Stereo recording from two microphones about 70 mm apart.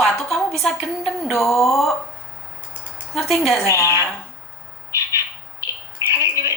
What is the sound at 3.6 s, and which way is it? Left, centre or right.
Speech, left.